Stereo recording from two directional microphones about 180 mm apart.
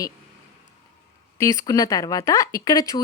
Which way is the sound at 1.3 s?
15° left (ahead or behind).